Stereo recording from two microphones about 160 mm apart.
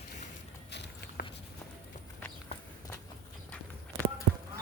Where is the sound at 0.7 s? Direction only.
90° left.